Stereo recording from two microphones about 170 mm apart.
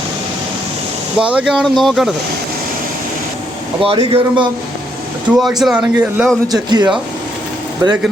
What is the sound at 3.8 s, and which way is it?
Speech, 30° right (ahead or behind).